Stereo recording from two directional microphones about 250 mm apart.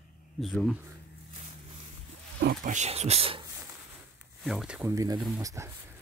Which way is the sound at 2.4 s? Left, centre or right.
Right.